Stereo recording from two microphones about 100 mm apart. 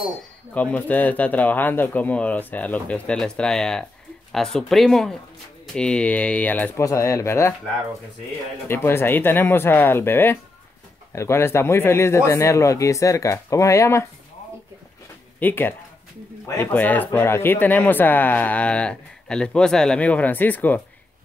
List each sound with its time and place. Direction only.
0.6 s speech: 15° left (ahead or behind)
6.8 s speech: 30° left (ahead or behind)
8.6 s speech: 25° left (ahead or behind)
15.3 s speech: 20° left (ahead or behind)